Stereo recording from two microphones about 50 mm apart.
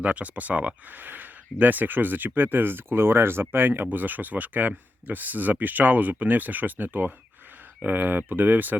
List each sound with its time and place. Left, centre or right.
0.0 s speech: right
3.5 s speech: right